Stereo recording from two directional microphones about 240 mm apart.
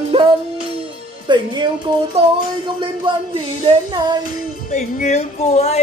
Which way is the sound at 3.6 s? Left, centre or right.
Centre.